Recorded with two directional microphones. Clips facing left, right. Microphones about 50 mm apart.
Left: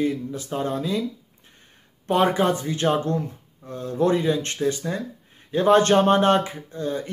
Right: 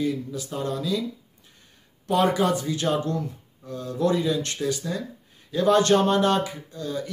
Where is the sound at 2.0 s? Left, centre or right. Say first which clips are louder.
Left 2 dB; left.